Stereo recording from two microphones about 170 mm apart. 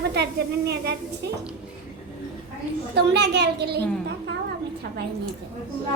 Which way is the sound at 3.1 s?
80° right.